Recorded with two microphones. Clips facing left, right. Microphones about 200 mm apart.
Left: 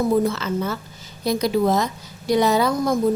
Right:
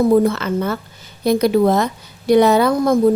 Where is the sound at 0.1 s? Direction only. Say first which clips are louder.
Right 5 dB; 60° right (ahead or behind).